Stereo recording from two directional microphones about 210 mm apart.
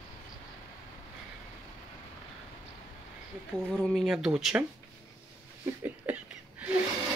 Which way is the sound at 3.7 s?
Centre (ahead or behind).